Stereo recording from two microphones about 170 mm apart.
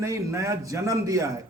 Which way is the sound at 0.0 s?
20° right (ahead or behind).